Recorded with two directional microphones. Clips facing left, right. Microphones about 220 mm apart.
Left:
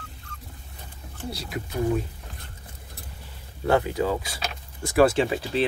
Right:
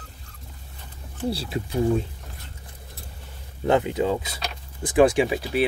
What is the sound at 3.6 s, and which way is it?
Speech, 20° right (ahead or behind).